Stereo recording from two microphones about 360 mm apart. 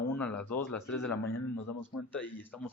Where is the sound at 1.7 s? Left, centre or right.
Left.